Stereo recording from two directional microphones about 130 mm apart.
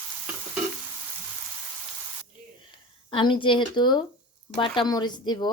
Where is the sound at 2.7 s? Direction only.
40° left (ahead or behind).